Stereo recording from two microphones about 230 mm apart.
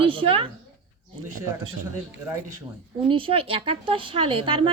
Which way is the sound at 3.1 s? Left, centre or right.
Right.